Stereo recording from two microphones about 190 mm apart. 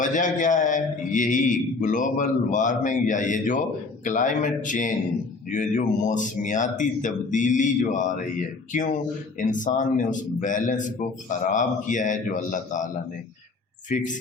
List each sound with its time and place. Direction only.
0.0 s a man's voice: 45° left (ahead or behind)